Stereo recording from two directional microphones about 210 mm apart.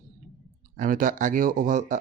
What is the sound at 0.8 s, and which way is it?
Speech, 40° right (ahead or behind).